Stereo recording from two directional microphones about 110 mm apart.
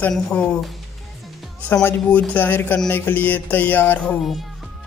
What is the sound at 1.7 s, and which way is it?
Speech, 20° left (ahead or behind).